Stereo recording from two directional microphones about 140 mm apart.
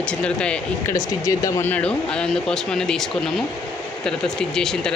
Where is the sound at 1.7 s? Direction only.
5° left (ahead or behind).